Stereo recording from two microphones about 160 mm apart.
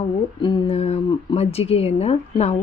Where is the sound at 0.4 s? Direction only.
30° left (ahead or behind).